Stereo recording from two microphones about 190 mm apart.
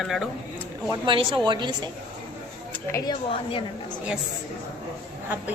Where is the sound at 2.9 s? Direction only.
25° left (ahead or behind).